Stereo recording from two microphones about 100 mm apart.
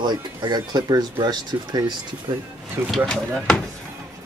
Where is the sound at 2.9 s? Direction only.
Centre (ahead or behind).